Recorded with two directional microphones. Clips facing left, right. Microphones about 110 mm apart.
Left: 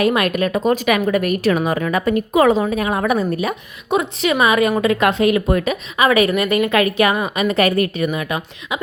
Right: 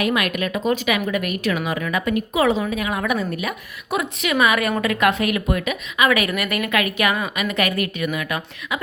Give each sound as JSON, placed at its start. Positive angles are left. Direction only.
{"t": 0.0, "sound": "speech", "side_deg": 35}